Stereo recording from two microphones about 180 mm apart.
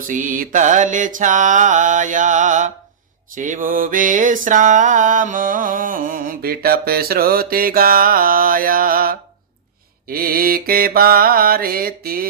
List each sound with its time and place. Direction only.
0.1 s mantra: 45° right (ahead or behind)